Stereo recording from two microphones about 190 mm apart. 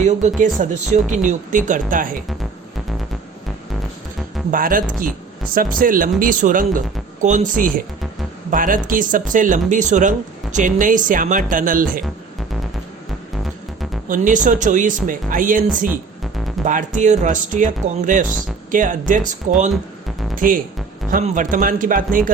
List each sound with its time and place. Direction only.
0.0 s speech: 40° right (ahead or behind)
4.5 s speech: 45° right (ahead or behind)
14.1 s speech: 40° right (ahead or behind)